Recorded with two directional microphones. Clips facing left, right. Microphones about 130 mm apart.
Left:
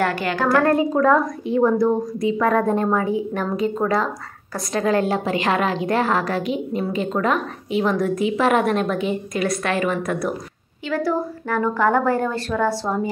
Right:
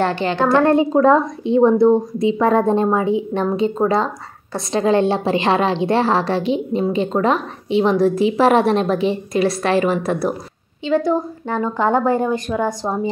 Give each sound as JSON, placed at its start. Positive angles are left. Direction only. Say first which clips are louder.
{"t": 0.0, "sound": "a woman's voice", "louder": "right 3 dB", "side_deg": -25}